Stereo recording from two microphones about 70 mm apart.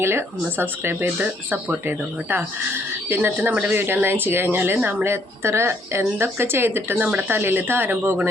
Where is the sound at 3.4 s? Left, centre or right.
Right.